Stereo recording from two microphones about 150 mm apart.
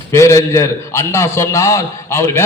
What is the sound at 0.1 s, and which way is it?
A man's voice, 20° left (ahead or behind).